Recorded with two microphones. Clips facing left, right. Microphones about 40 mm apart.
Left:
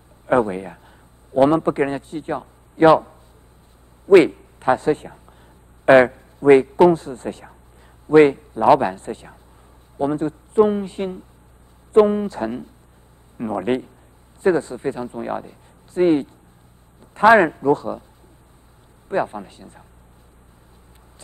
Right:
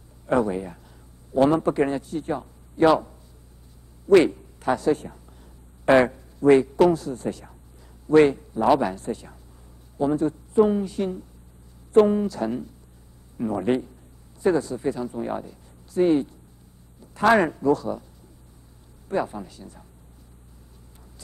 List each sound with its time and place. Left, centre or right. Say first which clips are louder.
0.3 s a man's voice: left 4 dB; left
19.0 s speech: left 4 dB; left